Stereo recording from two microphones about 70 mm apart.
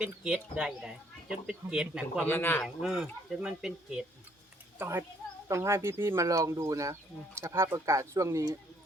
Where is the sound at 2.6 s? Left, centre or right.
Centre.